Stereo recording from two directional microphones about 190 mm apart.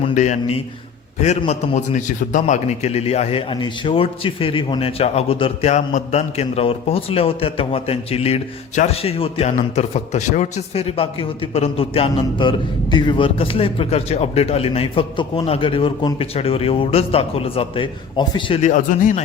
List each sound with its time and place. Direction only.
0.1 s a man's voice: 40° left (ahead or behind)
18.7 s speech: 45° left (ahead or behind)